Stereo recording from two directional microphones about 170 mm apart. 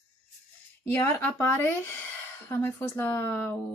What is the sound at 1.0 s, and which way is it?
A woman's voice, 15° left (ahead or behind).